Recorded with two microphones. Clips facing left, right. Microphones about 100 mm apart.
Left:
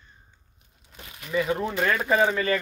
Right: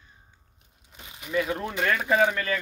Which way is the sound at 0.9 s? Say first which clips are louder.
Even; 15° right (ahead or behind).